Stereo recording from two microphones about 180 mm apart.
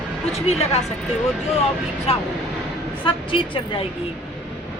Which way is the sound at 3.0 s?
30° left (ahead or behind).